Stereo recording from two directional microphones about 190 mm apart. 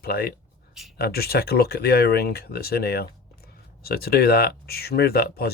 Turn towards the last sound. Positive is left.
turn(degrees=55)  # may be behind; listen again after turning